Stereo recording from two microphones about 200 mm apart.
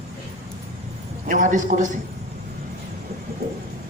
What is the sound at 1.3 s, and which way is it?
Speech, 40° right (ahead or behind).